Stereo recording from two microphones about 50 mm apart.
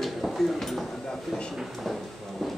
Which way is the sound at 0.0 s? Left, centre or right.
Centre.